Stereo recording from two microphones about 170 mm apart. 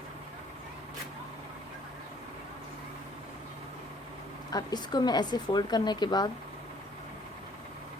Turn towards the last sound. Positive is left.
turn(degrees=25)  # may be behind; listen again after turning